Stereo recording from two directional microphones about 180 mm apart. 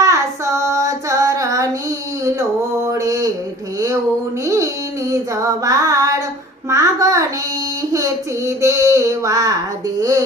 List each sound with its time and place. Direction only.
0.0 s child singing: 15° right (ahead or behind)
2.8 s mantra: 20° right (ahead or behind)
4.4 s a sound: 15° right (ahead or behind)
6.7 s music: 15° right (ahead or behind)
7.9 s female singing: 20° right (ahead or behind)
10.0 s a sound: 20° right (ahead or behind)